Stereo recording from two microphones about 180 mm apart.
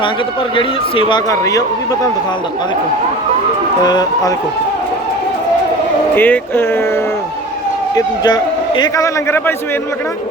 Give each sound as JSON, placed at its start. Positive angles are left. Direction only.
{"t": 0.5, "sound": "speech", "side_deg": 25}
{"t": 3.8, "sound": "speech", "side_deg": 20}
{"t": 6.1, "sound": "speech", "side_deg": 10}
{"t": 7.9, "sound": "a man's voice", "side_deg": 25}